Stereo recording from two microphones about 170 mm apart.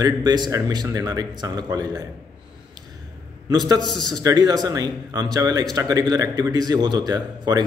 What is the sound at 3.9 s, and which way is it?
Speech, 25° right (ahead or behind).